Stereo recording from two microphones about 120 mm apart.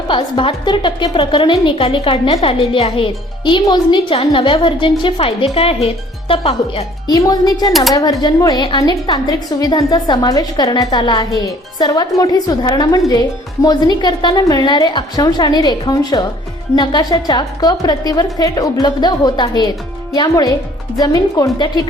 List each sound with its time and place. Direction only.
0.1 s a woman's voice: 45° left (ahead or behind)
7.1 s a woman's voice: 30° left (ahead or behind)